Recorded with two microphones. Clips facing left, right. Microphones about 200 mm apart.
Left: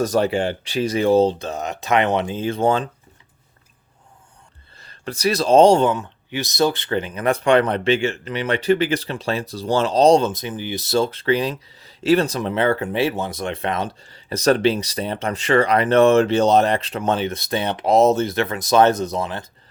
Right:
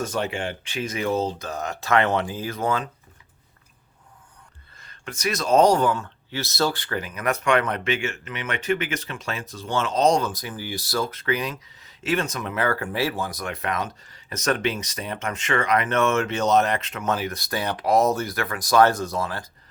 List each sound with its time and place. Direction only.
0.0 s speech: 35° left (ahead or behind)
4.8 s speech: 35° left (ahead or behind)